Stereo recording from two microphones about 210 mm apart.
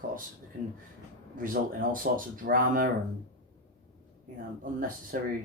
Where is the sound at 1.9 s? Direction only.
40° right (ahead or behind).